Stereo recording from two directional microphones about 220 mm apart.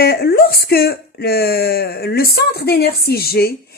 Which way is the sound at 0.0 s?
45° left (ahead or behind).